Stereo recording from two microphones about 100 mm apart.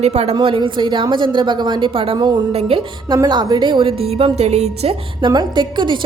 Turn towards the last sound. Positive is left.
turn(degrees=-50)  # may be behind; listen again after turning